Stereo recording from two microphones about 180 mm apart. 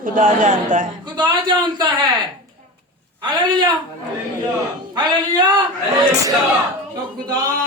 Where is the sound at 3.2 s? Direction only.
25° right (ahead or behind).